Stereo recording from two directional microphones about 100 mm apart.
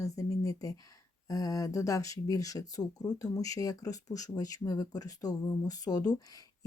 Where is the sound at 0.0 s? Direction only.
35° left (ahead or behind).